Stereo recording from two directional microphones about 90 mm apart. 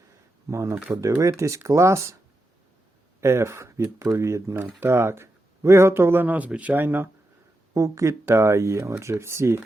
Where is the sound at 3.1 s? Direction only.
30° right (ahead or behind).